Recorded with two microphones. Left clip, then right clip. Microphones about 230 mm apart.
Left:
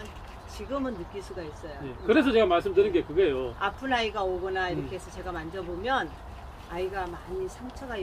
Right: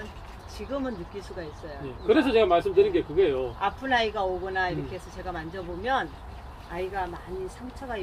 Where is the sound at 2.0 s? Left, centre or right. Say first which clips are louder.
Right 1 dB; left.